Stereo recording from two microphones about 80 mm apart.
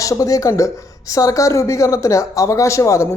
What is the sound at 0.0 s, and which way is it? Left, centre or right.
Speech, left.